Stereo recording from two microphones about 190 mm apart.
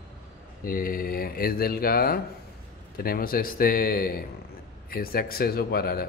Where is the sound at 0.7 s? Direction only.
50° left (ahead or behind).